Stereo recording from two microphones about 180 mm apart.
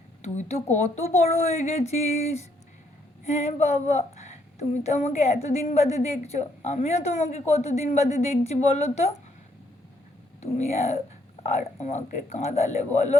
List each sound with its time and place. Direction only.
0.2 s speech: 40° left (ahead or behind)
10.4 s speech: 40° left (ahead or behind)